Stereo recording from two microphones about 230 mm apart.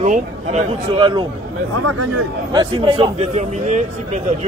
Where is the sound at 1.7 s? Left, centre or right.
Right.